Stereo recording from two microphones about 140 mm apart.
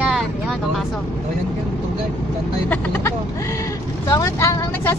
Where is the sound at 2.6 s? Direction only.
15° left (ahead or behind).